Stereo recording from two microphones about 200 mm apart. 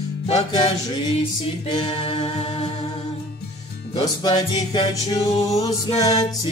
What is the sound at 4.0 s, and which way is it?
Music, 25° left (ahead or behind).